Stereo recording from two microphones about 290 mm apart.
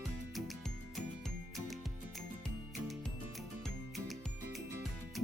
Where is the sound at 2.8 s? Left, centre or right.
Centre.